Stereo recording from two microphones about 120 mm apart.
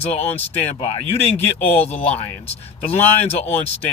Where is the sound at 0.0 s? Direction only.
60° left (ahead or behind).